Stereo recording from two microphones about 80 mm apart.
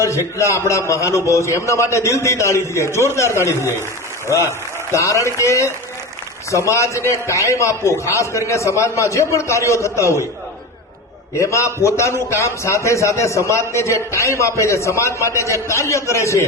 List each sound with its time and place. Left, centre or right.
0.3 s a man's voice: left
11.3 s a man's voice: left